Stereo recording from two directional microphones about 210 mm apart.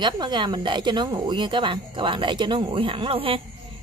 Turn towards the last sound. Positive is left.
turn(degrees=-25)  # may be behind; listen again after turning